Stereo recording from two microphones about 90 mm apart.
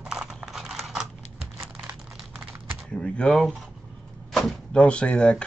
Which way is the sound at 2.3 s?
25° right (ahead or behind).